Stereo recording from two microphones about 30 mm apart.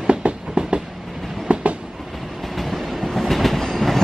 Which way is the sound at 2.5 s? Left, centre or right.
Centre.